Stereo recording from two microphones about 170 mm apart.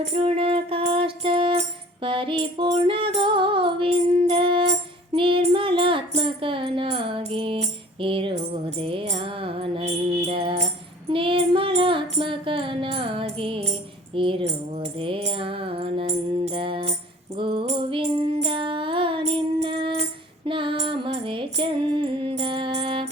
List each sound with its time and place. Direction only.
0.0 s music: 35° right (ahead or behind)